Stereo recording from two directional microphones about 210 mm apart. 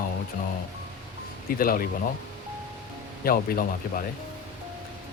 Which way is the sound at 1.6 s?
45° left (ahead or behind).